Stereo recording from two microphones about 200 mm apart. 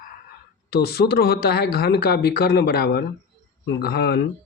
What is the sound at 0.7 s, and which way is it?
Speech, 50° left (ahead or behind).